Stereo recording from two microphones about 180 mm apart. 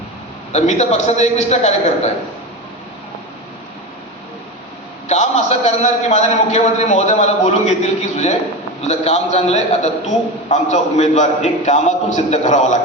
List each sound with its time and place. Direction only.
0.5 s a man's voice: 40° left (ahead or behind)
5.0 s a man's voice: 40° left (ahead or behind)